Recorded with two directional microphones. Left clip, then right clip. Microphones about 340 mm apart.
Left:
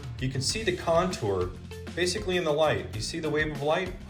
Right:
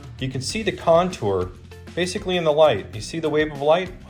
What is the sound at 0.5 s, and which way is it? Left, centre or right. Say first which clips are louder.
Speech: right 8 dB; centre.